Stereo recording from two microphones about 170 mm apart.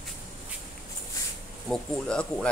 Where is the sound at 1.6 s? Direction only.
5° left (ahead or behind).